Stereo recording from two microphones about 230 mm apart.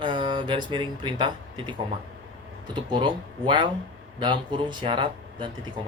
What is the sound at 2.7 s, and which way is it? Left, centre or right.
Speech, centre.